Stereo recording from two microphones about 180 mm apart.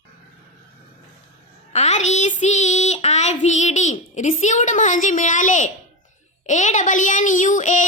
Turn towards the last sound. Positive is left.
turn(degrees=45)  # may be behind; listen again after turning